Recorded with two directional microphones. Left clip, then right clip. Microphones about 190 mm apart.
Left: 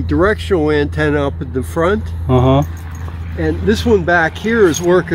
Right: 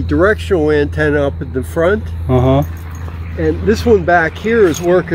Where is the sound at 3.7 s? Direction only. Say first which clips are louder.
Right 2 dB; 50° left (ahead or behind).